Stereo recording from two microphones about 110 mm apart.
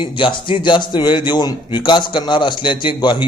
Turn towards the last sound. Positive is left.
turn(degrees=45)  # may be behind; listen again after turning